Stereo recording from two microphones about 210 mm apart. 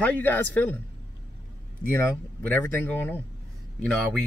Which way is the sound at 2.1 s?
10° left (ahead or behind).